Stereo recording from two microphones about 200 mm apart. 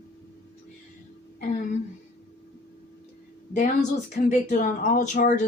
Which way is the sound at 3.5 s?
35° left (ahead or behind).